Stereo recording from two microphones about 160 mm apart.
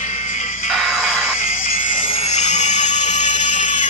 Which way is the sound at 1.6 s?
55° left (ahead or behind).